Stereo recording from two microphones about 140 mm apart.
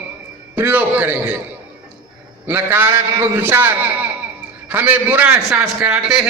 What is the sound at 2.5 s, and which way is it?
A man's voice, 15° right (ahead or behind).